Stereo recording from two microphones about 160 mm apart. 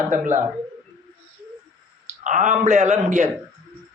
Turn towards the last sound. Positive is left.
turn(degrees=-45)  # may be behind; listen again after turning